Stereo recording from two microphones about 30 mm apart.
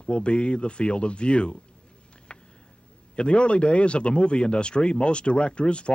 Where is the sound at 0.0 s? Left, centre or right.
Left.